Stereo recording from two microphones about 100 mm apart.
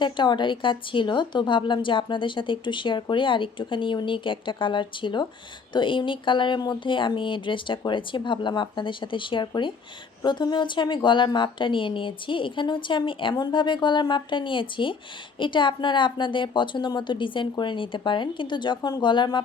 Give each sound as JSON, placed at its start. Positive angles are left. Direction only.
{"t": 0.0, "sound": "a woman's voice", "side_deg": 50}